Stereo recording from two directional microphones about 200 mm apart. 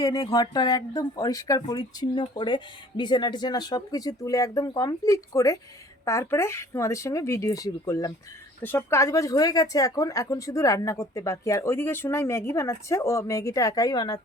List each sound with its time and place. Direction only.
0.0 s speech: 20° left (ahead or behind)